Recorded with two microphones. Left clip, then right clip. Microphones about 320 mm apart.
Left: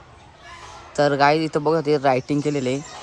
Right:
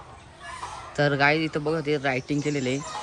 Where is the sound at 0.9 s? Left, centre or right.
Centre.